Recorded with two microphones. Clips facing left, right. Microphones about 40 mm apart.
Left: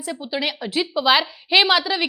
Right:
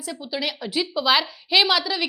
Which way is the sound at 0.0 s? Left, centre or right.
Centre.